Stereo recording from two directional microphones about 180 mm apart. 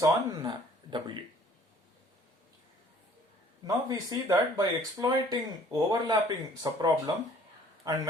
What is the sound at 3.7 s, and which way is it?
Speech, 20° right (ahead or behind).